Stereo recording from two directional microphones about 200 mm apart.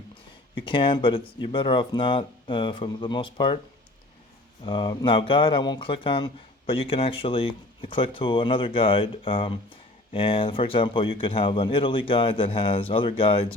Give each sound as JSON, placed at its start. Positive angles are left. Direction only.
{"t": 0.1, "sound": "speech", "side_deg": 25}
{"t": 4.6, "sound": "speech", "side_deg": 25}